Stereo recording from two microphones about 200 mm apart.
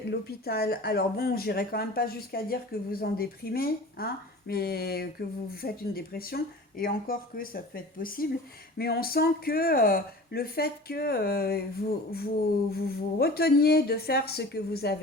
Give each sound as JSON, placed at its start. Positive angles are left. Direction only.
{"t": 0.1, "sound": "speech", "side_deg": 50}